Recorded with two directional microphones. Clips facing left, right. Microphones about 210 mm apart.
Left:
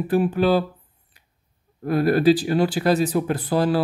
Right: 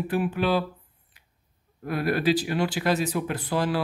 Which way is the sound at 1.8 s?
35° left (ahead or behind).